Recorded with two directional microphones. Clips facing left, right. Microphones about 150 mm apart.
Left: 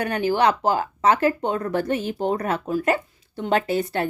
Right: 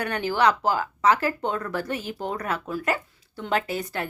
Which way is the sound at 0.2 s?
20° left (ahead or behind).